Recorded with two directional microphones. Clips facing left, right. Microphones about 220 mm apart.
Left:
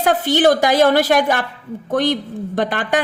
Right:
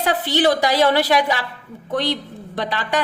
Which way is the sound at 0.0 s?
50° left (ahead or behind).